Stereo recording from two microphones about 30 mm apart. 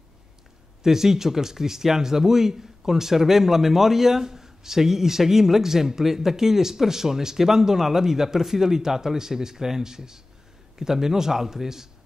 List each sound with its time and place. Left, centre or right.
0.8 s speech: centre